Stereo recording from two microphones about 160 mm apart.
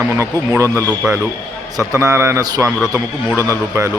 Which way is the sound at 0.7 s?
15° left (ahead or behind).